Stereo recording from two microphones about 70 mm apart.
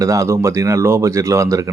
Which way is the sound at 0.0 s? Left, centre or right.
Right.